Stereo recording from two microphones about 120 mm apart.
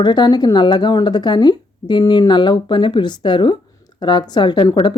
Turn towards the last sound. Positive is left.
turn(degrees=40)  # may be behind; listen again after turning